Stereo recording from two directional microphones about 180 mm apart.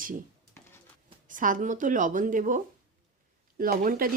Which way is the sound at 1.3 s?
45° right (ahead or behind).